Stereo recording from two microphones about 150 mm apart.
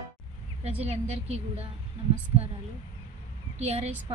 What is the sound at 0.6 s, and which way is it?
A woman's voice, 45° right (ahead or behind).